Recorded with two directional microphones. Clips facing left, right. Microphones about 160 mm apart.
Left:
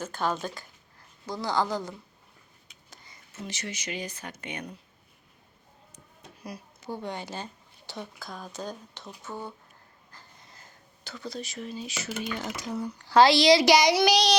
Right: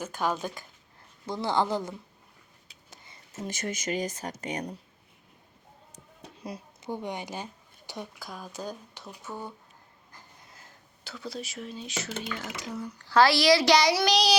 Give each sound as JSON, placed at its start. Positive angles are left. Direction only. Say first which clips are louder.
{"t": 0.0, "sound": "speech", "louder": "even", "side_deg": -10}
{"t": 1.3, "sound": "speech", "louder": "right 1 dB", "side_deg": -25}
{"t": 2.9, "sound": "a sound", "louder": "right 1 dB", "side_deg": -20}
{"t": 3.3, "sound": "speech", "louder": "right 4 dB", "side_deg": -50}
{"t": 6.4, "sound": "speech", "louder": "right 2 dB", "side_deg": -25}
{"t": 10.5, "sound": "speech", "louder": "even", "side_deg": -5}
{"t": 12.3, "sound": "a woman's voice", "louder": "left 3 dB", "side_deg": 20}
{"t": 14.1, "sound": "child singing", "louder": "left 1 dB", "side_deg": 0}